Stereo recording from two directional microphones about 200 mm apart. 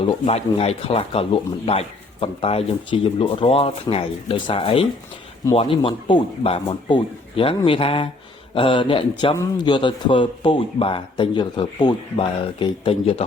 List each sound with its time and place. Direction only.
0.3 s speech: 30° left (ahead or behind)